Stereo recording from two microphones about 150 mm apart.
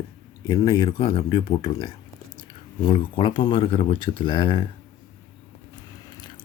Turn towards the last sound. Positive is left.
turn(degrees=35)  # may be behind; listen again after turning